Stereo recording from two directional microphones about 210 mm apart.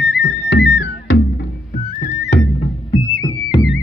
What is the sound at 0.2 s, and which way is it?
Music, 55° left (ahead or behind).